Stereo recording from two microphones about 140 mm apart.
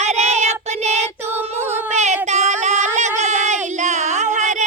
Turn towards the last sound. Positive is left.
turn(degrees=-60)  # may be behind; listen again after turning